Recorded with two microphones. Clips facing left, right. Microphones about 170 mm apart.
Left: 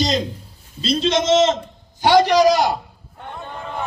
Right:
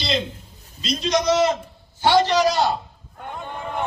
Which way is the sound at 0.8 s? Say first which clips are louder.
Left 3 dB; 30° left (ahead or behind).